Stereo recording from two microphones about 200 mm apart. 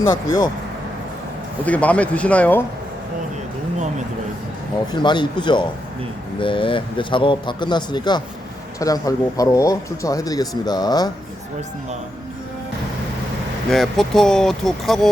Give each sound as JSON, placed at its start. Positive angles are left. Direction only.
{"t": 0.1, "sound": "speech", "side_deg": 20}
{"t": 1.6, "sound": "speech", "side_deg": 5}
{"t": 4.9, "sound": "speech", "side_deg": 20}
{"t": 13.7, "sound": "speech", "side_deg": 0}